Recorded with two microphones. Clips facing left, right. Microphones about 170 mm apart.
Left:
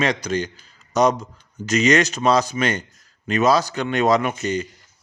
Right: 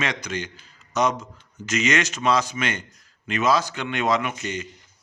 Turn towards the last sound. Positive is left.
turn(degrees=35)  # may be behind; listen again after turning